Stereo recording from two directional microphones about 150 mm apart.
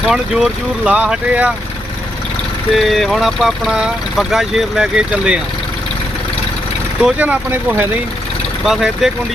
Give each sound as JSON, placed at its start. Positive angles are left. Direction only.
{"t": 0.1, "sound": "speech", "side_deg": -5}
{"t": 2.7, "sound": "speech", "side_deg": 0}
{"t": 7.0, "sound": "speech", "side_deg": -10}